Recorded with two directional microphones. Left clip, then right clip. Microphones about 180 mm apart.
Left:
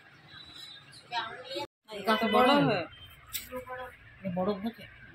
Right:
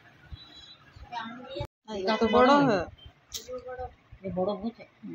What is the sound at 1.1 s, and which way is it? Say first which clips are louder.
Speech: left 2 dB; centre (ahead or behind).